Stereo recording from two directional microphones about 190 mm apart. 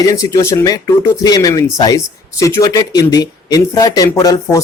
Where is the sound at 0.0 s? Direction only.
20° left (ahead or behind).